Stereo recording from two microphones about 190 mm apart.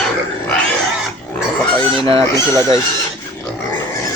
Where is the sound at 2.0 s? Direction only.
30° right (ahead or behind).